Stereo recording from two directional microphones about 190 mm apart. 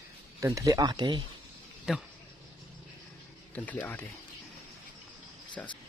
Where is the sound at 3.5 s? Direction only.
10° left (ahead or behind).